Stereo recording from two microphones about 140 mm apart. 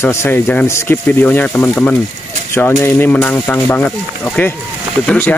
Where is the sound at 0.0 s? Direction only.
20° left (ahead or behind).